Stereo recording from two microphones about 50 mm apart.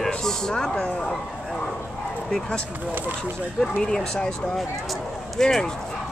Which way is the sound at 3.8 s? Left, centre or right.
Centre.